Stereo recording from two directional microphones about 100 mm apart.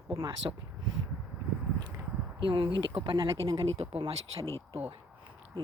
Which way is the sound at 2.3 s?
55° right (ahead or behind).